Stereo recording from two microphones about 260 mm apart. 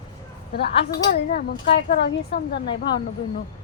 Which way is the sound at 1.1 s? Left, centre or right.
Left.